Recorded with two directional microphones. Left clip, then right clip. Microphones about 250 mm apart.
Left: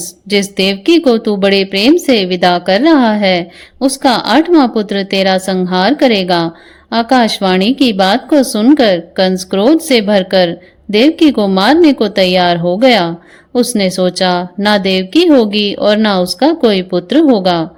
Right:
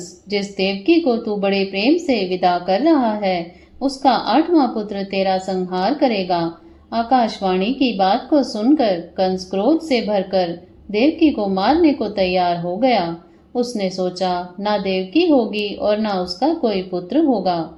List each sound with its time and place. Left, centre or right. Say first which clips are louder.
0.3 s a woman's voice: left 8 dB; left